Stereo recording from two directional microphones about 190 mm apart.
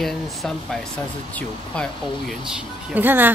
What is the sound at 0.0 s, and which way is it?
A woman's voice, centre (ahead or behind).